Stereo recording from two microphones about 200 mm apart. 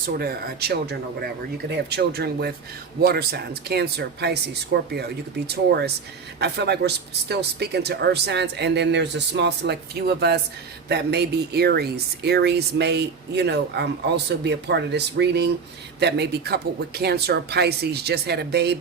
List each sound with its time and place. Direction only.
0.2 s speech: 50° right (ahead or behind)